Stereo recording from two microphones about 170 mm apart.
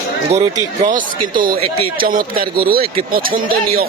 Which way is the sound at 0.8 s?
50° right (ahead or behind).